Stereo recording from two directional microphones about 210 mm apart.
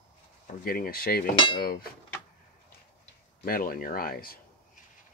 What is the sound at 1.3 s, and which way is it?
Cutlery, 20° left (ahead or behind).